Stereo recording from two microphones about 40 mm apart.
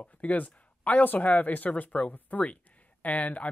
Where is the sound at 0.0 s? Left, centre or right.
Left.